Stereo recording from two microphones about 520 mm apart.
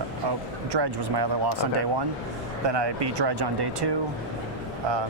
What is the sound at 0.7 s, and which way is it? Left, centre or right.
A man's voice, right.